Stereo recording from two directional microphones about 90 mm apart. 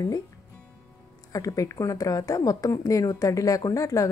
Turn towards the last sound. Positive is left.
turn(degrees=40)  # may be behind; listen again after turning